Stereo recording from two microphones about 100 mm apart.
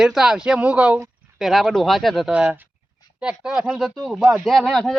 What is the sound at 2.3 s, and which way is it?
Speech, 15° right (ahead or behind).